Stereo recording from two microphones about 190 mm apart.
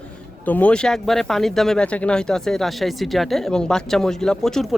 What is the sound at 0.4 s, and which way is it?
Speech, 5° left (ahead or behind).